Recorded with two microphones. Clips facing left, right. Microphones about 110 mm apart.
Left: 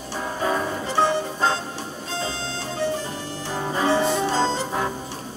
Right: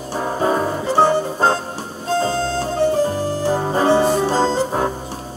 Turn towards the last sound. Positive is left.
turn(degrees=-40)  # may be behind; listen again after turning